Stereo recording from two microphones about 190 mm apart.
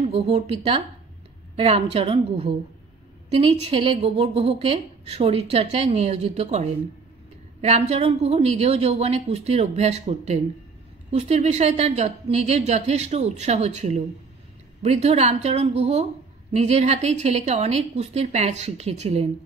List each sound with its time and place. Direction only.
0.0 s a woman's voice: 30° right (ahead or behind)